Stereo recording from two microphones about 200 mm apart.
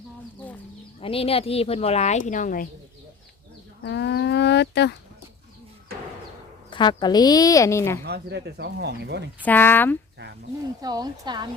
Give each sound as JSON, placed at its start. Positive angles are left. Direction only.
{"t": 1.0, "sound": "speech", "side_deg": 30}
{"t": 3.8, "sound": "livestock", "side_deg": 60}
{"t": 6.7, "sound": "a woman's voice", "side_deg": 25}
{"t": 8.0, "sound": "speech", "side_deg": -55}
{"t": 9.4, "sound": "speech", "side_deg": 10}
{"t": 10.8, "sound": "speech", "side_deg": -20}